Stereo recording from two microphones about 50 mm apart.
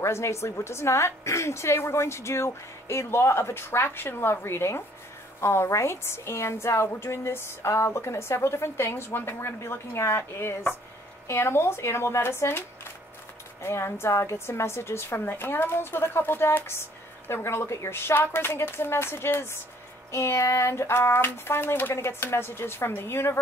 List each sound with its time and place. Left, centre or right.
0.0 s a woman's voice: left
21.9 s a woman's voice: left